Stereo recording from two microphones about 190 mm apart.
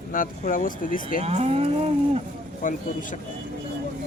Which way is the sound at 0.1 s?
45° left (ahead or behind).